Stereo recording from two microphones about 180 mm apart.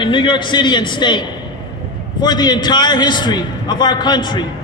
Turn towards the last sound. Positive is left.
turn(degrees=25)  # may be behind; listen again after turning